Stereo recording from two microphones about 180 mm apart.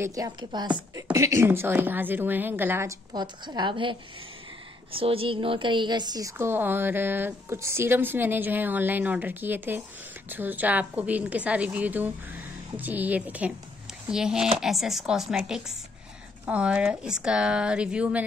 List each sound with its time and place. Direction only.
0.0 s a woman's voice: 20° right (ahead or behind)
4.9 s speech: 30° right (ahead or behind); by 18.2 s 5° right (ahead or behind)